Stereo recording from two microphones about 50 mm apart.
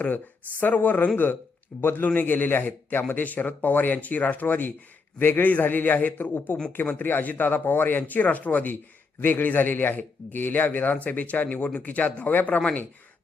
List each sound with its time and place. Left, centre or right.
0.6 s a man's voice: left
2.0 s a man's voice: left